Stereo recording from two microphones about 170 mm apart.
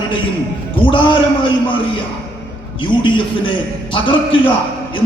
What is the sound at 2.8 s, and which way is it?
A man's voice, 30° left (ahead or behind).